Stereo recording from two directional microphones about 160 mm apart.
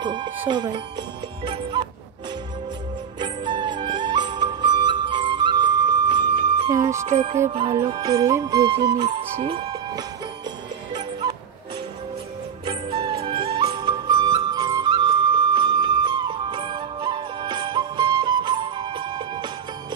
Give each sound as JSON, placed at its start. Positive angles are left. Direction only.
{"t": 0.0, "sound": "music", "side_deg": -30}
{"t": 3.2, "sound": "music", "side_deg": -30}
{"t": 7.1, "sound": "music", "side_deg": -45}
{"t": 7.5, "sound": "music", "side_deg": -30}
{"t": 9.0, "sound": "speech", "side_deg": -35}
{"t": 10.9, "sound": "music", "side_deg": -25}
{"t": 12.6, "sound": "music", "side_deg": -30}